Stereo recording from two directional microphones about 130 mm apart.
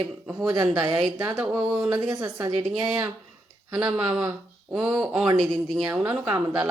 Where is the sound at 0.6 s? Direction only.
35° right (ahead or behind).